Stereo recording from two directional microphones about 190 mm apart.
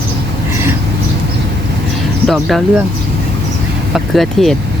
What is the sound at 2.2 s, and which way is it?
Speech, centre (ahead or behind).